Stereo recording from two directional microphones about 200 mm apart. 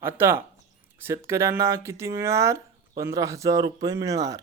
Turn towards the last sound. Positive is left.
turn(degrees=-15)  # may be behind; listen again after turning